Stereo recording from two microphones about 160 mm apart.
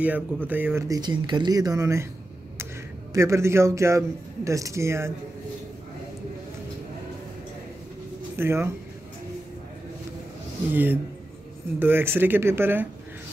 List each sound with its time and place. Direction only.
0.0 s speech: 10° right (ahead or behind)
2.5 s a sound: 15° right (ahead or behind)
4.5 s speech: 20° right (ahead or behind)
8.4 s speech: 15° right (ahead or behind)
10.7 s speech: 10° right (ahead or behind)